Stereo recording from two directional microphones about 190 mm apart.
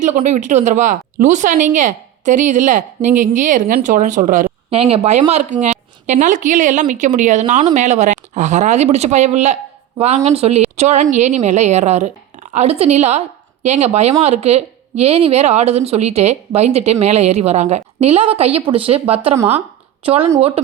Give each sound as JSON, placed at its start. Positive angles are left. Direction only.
{"t": 0.0, "sound": "a woman's voice", "side_deg": -40}
{"t": 4.7, "sound": "a woman's voice", "side_deg": -30}